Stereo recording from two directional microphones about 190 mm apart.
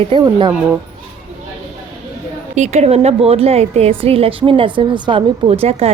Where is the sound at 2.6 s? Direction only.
35° right (ahead or behind).